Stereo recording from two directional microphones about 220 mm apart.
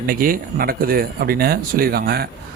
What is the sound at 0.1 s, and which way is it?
A man's voice, 40° right (ahead or behind).